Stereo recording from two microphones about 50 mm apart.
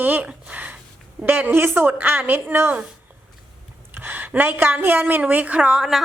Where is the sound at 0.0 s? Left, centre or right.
Right.